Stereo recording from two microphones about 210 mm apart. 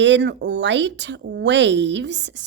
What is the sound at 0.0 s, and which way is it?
Speech, 60° right (ahead or behind).